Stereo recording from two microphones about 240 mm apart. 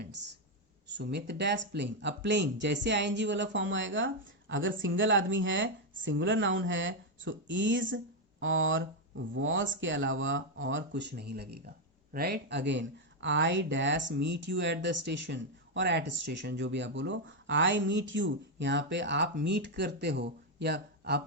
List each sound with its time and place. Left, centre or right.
0.9 s speech: right